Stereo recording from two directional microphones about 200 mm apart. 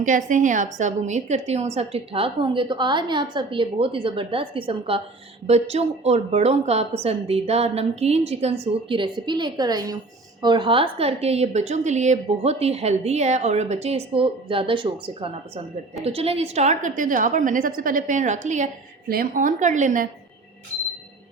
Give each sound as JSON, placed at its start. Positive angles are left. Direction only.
{"t": 0.0, "sound": "a woman's voice", "side_deg": -40}